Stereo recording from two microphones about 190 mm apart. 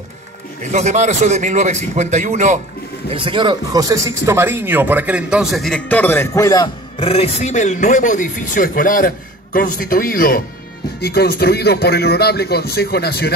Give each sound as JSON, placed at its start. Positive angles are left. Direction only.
{"t": 0.7, "sound": "a man's voice", "side_deg": -40}
{"t": 3.1, "sound": "speech", "side_deg": -25}
{"t": 7.0, "sound": "a man's voice", "side_deg": 30}